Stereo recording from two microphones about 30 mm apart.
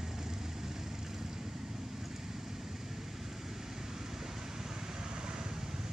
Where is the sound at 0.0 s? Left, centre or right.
Centre.